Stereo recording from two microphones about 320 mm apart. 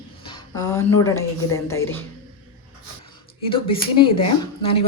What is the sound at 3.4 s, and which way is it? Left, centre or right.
Speech, centre.